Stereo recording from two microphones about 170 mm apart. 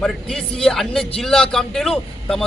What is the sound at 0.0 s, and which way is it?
A man's voice, 5° left (ahead or behind).